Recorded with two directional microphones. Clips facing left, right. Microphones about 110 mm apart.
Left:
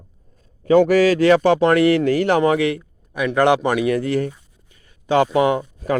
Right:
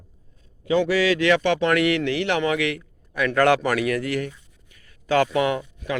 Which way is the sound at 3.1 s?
20° left (ahead or behind).